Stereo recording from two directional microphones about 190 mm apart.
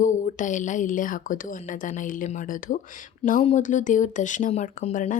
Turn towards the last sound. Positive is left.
turn(degrees=40)  # may be behind; listen again after turning